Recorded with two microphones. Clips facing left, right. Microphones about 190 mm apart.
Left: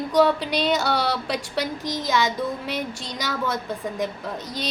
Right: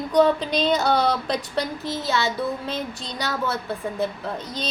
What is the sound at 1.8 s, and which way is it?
A woman's voice, 15° left (ahead or behind).